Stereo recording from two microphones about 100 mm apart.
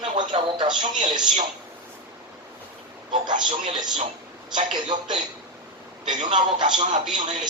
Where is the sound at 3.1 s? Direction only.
50° right (ahead or behind).